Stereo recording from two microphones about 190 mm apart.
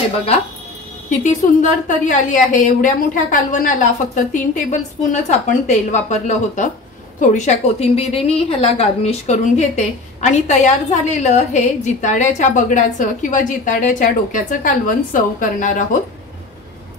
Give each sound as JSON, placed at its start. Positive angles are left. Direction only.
{"t": 1.2, "sound": "a woman's voice", "side_deg": 40}